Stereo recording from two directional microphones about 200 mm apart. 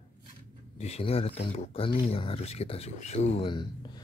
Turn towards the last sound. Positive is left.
turn(degrees=25)  # may be behind; listen again after turning